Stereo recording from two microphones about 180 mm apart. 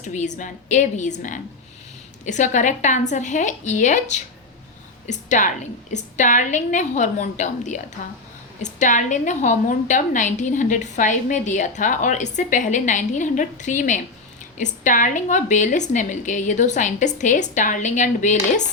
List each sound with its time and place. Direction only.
0.0 s a woman's voice: 40° left (ahead or behind)